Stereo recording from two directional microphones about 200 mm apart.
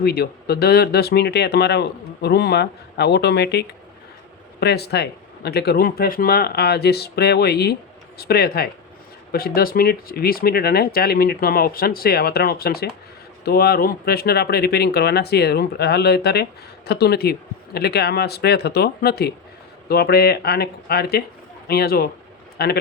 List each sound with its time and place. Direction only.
0.0 s a man's voice: 50° left (ahead or behind)